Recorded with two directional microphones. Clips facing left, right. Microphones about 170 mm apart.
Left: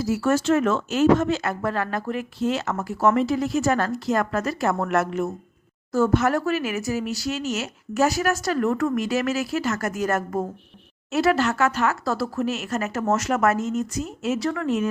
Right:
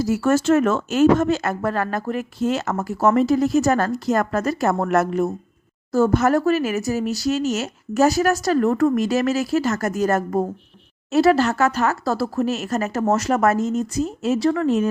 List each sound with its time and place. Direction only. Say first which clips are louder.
0.0 s speech: right 3 dB; 45° right (ahead or behind)